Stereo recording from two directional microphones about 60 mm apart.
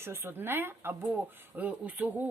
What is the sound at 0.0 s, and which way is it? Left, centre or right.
Speech, right.